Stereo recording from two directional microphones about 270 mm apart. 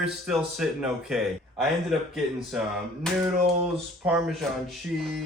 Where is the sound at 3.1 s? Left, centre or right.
Centre.